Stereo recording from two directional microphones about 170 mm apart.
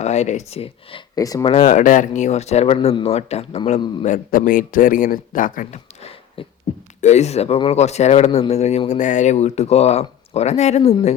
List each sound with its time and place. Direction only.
0.0 s speech: 40° left (ahead or behind)
1.1 s speech: 20° left (ahead or behind)
1.5 s speech: 40° left (ahead or behind)
4.0 s speech: 50° left (ahead or behind)